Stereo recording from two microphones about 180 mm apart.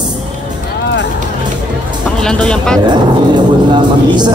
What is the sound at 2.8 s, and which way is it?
A woman's voice, 25° right (ahead or behind).